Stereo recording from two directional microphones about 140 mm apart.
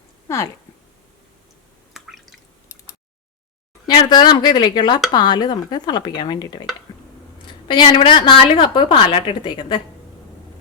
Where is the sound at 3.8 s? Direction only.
30° left (ahead or behind).